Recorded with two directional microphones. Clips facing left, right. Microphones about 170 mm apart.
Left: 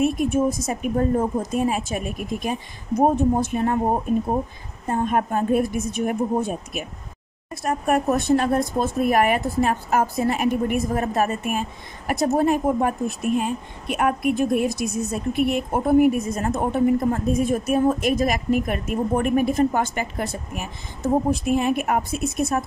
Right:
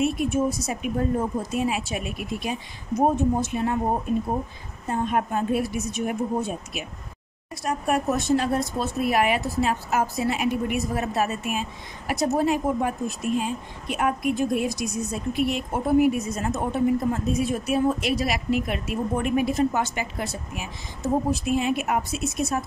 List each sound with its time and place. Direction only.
0.0 s a woman's voice: 50° left (ahead or behind)
3.0 s speech: 55° left (ahead or behind)
4.8 s a woman's voice: 50° left (ahead or behind)